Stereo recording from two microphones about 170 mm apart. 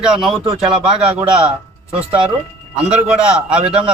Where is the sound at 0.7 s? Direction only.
30° right (ahead or behind).